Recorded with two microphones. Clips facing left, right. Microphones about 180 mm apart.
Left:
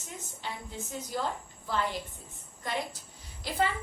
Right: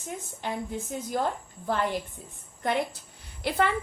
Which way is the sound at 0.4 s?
50° right (ahead or behind).